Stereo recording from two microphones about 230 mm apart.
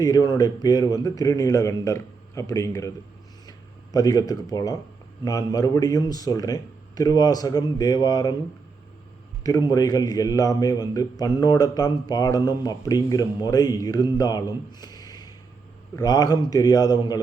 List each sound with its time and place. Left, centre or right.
0.0 s a man's voice: centre
3.9 s a man's voice: centre
9.4 s a man's voice: centre